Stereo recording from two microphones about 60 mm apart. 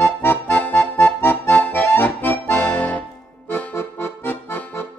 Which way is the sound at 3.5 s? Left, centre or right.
Left.